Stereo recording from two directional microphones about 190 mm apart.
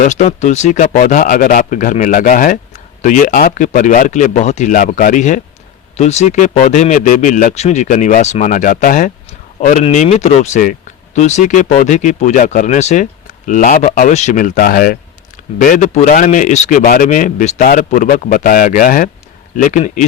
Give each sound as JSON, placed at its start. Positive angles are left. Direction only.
{"t": 0.0, "sound": "speech", "side_deg": 40}